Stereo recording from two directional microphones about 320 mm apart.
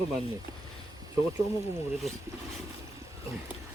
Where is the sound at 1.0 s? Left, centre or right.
Centre.